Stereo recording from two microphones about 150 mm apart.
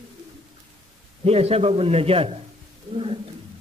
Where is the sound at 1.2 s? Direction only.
40° right (ahead or behind).